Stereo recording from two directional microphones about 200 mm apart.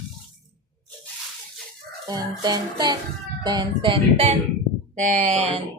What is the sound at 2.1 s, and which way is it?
Mantra, 20° right (ahead or behind).